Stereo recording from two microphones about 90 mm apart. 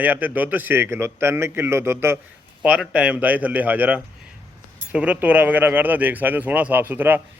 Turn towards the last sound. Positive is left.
turn(degrees=-25)  # may be behind; listen again after turning